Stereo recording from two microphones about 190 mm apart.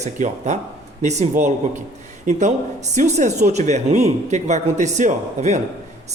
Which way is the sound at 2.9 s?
40° right (ahead or behind).